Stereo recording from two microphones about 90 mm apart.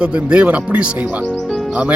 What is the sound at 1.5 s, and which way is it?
Music, 5° left (ahead or behind).